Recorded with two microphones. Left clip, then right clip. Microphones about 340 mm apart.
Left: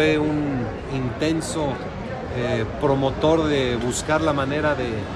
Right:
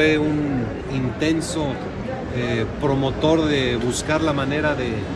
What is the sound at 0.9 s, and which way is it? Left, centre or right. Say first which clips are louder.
Speech: right 2 dB; centre.